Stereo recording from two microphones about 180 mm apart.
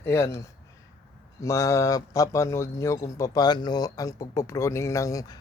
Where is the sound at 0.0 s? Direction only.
15° left (ahead or behind).